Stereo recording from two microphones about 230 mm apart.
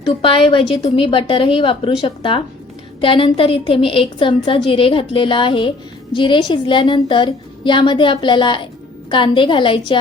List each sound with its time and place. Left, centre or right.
0.0 s a woman's voice: left